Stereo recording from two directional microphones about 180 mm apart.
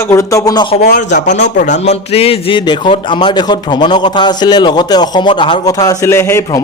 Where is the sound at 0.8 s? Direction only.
45° left (ahead or behind); by 6.6 s 15° left (ahead or behind).